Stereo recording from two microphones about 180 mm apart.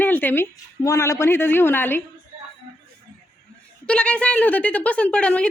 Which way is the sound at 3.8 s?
5° left (ahead or behind).